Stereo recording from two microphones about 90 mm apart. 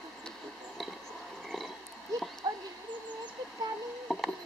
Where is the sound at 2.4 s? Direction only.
50° right (ahead or behind).